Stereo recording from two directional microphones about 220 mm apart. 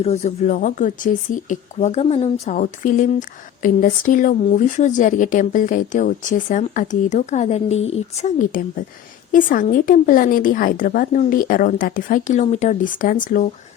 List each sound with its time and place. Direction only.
0.0 s speech: 30° left (ahead or behind)